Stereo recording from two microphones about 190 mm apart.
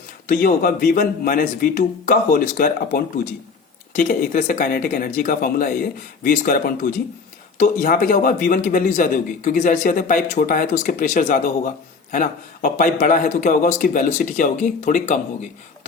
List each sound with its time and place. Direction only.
0.3 s speech: 45° left (ahead or behind)